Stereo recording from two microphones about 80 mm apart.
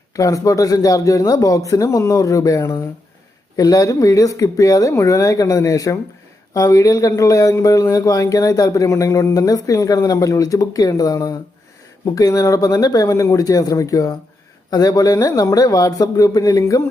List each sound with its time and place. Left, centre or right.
0.2 s a man's voice: left